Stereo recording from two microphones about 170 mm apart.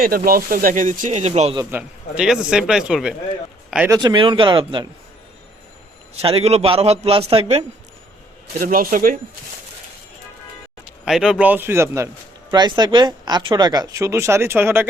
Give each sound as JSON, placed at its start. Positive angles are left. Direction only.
{"t": 0.0, "sound": "speech", "side_deg": -60}
{"t": 1.7, "sound": "speech", "side_deg": -5}
{"t": 3.8, "sound": "speech", "side_deg": -25}
{"t": 6.1, "sound": "a man's voice", "side_deg": -35}
{"t": 8.5, "sound": "a man's voice", "side_deg": -55}
{"t": 11.0, "sound": "a man's voice", "side_deg": -5}
{"t": 12.5, "sound": "speech", "side_deg": -25}